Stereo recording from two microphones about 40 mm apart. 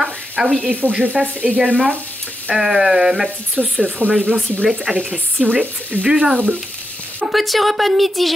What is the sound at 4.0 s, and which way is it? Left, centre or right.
Speech, right.